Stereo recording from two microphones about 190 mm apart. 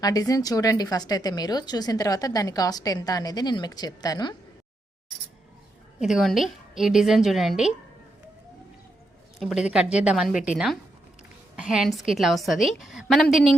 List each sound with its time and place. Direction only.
0.0 s a woman's voice: 20° left (ahead or behind)
6.0 s a woman's voice: centre (ahead or behind)
9.4 s a woman's voice: centre (ahead or behind)
11.6 s a woman's voice: centre (ahead or behind)